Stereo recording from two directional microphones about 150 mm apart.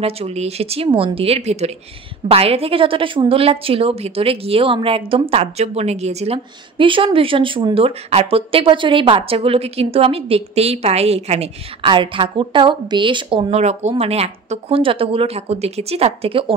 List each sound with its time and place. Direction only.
0.0 s a woman's voice: 45° right (ahead or behind)
13.6 s speech: 45° right (ahead or behind)